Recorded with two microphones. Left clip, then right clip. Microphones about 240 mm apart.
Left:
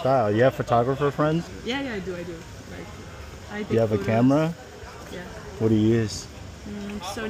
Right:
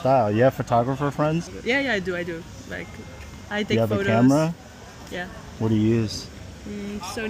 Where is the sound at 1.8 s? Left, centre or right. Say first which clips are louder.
Right 7 dB; right.